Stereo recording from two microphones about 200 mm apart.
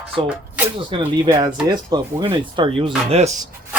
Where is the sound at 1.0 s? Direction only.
15° right (ahead or behind); by 3.3 s 30° right (ahead or behind).